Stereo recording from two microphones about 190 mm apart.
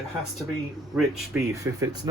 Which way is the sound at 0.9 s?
Centre (ahead or behind).